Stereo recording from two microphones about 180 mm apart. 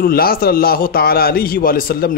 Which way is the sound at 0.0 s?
55° left (ahead or behind).